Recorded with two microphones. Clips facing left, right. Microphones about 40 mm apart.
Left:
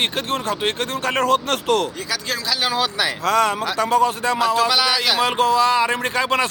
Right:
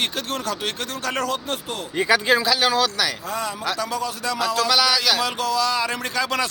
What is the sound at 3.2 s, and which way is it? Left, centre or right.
Speech, left.